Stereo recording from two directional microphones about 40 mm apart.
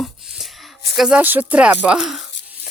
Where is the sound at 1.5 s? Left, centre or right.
Right.